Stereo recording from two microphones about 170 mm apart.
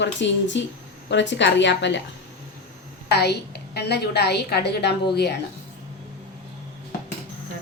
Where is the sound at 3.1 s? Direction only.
70° left (ahead or behind).